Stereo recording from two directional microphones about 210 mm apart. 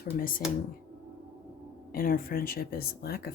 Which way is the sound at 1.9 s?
45° left (ahead or behind).